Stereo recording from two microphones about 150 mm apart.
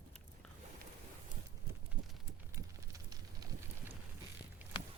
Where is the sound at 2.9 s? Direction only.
25° right (ahead or behind).